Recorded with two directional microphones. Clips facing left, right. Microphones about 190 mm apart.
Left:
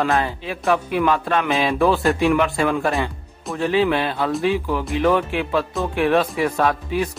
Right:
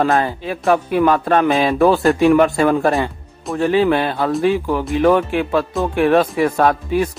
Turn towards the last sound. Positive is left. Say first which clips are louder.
# right 4 dB
turn(degrees=-45)  # may be behind; listen again after turning